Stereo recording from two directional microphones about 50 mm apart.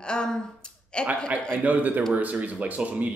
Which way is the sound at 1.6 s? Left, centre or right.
Right.